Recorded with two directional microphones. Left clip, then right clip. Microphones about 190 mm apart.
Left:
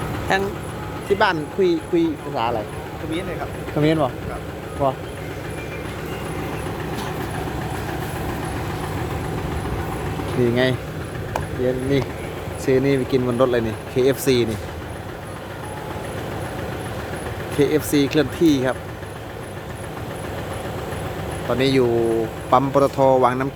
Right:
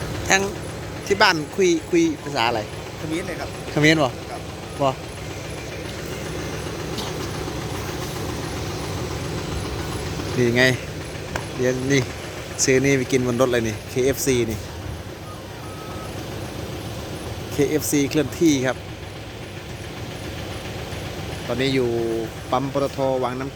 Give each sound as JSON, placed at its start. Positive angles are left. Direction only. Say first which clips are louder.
{"t": 0.3, "sound": "speech", "louder": "right 2 dB", "side_deg": -5}
{"t": 3.8, "sound": "speech", "louder": "right 2 dB", "side_deg": -10}
{"t": 10.4, "sound": "speech", "louder": "right 2 dB", "side_deg": 0}
{"t": 17.6, "sound": "speech", "louder": "left 2 dB", "side_deg": 0}
{"t": 21.6, "sound": "speech", "louder": "left 4 dB", "side_deg": 10}